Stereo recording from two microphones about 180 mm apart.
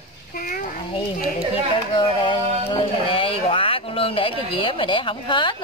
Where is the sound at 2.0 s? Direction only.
25° left (ahead or behind).